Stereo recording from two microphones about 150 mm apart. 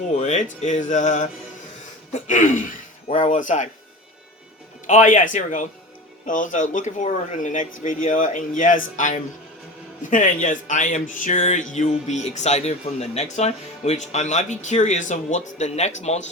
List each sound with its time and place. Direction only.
0.1 s speech: 50° left (ahead or behind)
4.9 s speech: 55° left (ahead or behind)